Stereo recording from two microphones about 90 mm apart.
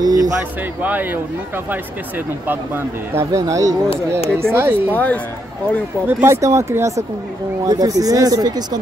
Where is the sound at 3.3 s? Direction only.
35° right (ahead or behind).